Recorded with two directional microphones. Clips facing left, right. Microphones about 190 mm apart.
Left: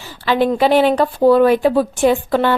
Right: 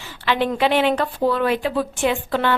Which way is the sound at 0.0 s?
40° left (ahead or behind).